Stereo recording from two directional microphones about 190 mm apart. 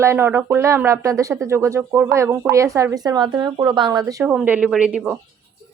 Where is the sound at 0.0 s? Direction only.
15° right (ahead or behind).